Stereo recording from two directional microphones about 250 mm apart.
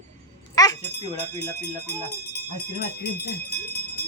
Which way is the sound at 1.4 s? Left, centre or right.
Left.